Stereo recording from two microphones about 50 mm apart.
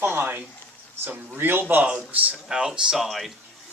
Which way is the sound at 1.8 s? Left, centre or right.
Right.